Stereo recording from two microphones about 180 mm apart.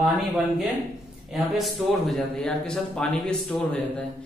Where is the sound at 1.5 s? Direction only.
Centre (ahead or behind).